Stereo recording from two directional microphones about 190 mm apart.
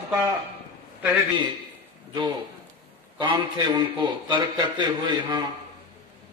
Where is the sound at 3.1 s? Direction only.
25° right (ahead or behind).